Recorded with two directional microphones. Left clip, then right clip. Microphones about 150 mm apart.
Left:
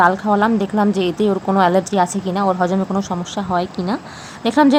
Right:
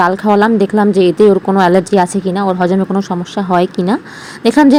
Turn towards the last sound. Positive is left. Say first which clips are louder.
# right 5 dB
turn(degrees=-25)  # may be behind; listen again after turning